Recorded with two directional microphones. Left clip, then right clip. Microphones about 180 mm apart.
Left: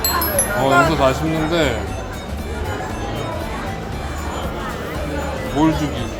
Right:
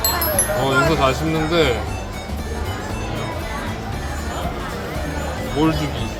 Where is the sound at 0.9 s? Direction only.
10° left (ahead or behind).